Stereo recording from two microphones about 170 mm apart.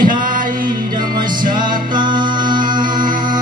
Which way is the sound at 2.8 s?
55° right (ahead or behind).